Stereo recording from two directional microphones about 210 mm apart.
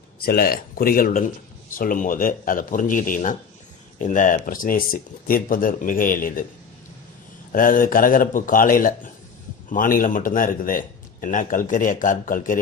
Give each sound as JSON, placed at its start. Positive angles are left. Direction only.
{"t": 0.2, "sound": "speech", "side_deg": 45}
{"t": 7.5, "sound": "speech", "side_deg": 40}